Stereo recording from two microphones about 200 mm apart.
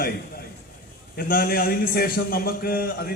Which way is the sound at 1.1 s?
50° left (ahead or behind).